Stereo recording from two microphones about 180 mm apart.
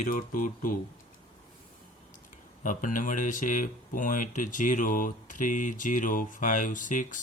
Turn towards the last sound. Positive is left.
turn(degrees=45)  # may be behind; listen again after turning